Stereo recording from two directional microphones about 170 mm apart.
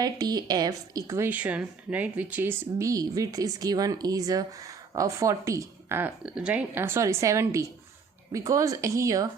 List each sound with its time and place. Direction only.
0.0 s speech: 25° right (ahead or behind)